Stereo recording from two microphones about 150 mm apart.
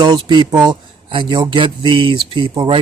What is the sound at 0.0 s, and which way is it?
Speech, 30° right (ahead or behind).